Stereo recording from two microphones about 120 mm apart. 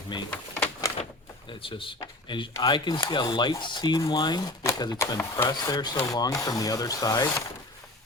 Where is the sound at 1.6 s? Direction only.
45° left (ahead or behind).